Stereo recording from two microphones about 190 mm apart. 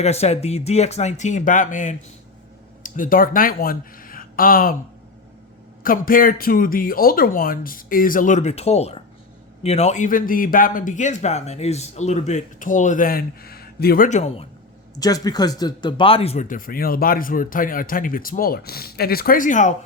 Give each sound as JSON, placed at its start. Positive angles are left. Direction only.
{"t": 0.0, "sound": "speech", "side_deg": 35}
{"t": 5.8, "sound": "speech", "side_deg": 50}
{"t": 14.9, "sound": "speech", "side_deg": 20}